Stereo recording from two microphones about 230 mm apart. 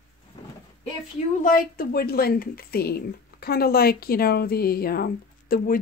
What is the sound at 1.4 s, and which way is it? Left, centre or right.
Speech, left.